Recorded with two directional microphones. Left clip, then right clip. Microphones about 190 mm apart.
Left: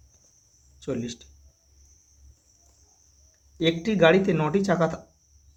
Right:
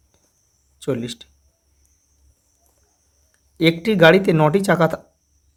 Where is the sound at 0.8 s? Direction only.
45° right (ahead or behind).